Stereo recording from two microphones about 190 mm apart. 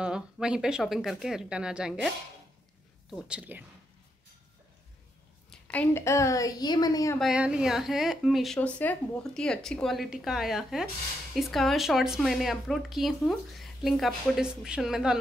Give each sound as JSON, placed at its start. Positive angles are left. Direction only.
{"t": 0.0, "sound": "speech", "side_deg": -5}
{"t": 3.3, "sound": "speech", "side_deg": -5}
{"t": 5.5, "sound": "a woman's voice", "side_deg": 10}
{"t": 7.2, "sound": "speech", "side_deg": -5}